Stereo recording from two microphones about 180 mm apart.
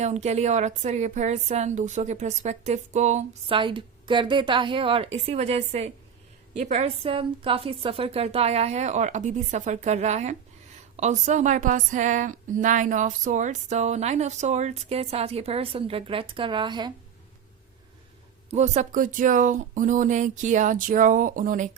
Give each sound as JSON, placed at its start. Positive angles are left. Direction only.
{"t": 0.0, "sound": "speech", "side_deg": -40}
{"t": 3.5, "sound": "a woman's voice", "side_deg": -30}
{"t": 18.5, "sound": "speech", "side_deg": -40}